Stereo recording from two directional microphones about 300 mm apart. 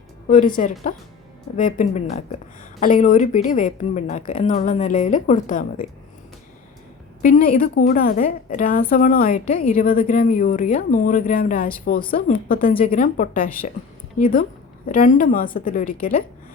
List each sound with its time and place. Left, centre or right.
0.3 s a woman's voice: left
7.2 s a woman's voice: left